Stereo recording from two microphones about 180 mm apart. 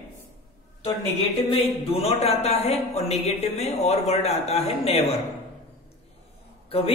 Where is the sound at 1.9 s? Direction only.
35° left (ahead or behind).